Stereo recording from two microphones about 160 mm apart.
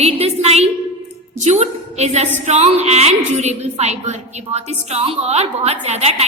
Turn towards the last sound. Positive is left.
turn(degrees=-40)  # may be behind; listen again after turning